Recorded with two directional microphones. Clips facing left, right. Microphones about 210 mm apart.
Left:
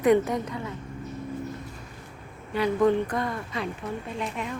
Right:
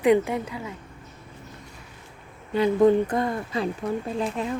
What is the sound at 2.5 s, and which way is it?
Speech, 25° right (ahead or behind).